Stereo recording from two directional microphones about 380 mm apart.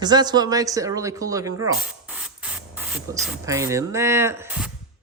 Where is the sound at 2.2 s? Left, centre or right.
Centre.